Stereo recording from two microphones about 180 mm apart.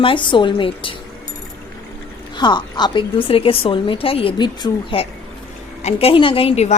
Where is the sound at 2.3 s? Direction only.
25° left (ahead or behind).